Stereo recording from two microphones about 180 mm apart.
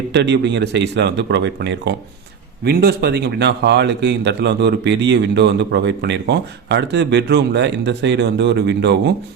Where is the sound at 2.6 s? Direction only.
60° right (ahead or behind).